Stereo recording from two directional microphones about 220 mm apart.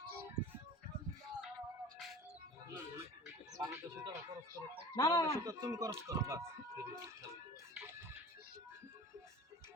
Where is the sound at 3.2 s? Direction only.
10° right (ahead or behind).